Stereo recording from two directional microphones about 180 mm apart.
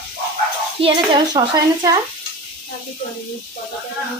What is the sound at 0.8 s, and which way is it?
Speech, 30° right (ahead or behind).